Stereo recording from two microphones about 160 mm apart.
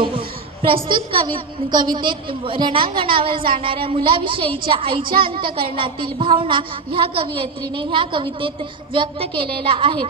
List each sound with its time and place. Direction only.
0.8 s a woman's voice: 30° right (ahead or behind)
5.0 s speech: 65° right (ahead or behind)
5.3 s a woman's voice: 35° right (ahead or behind)